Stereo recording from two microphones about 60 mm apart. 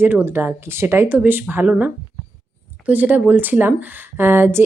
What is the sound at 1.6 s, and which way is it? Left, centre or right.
A woman's voice, right.